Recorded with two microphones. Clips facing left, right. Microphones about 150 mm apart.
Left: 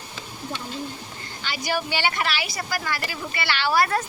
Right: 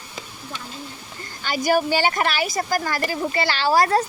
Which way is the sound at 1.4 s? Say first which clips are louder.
Right 8 dB; 45° right (ahead or behind).